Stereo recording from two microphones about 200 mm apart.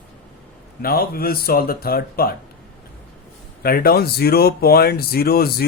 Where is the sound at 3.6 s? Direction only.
50° left (ahead or behind).